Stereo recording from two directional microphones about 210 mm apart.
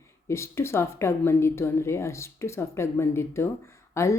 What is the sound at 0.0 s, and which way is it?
A woman's voice, 15° left (ahead or behind).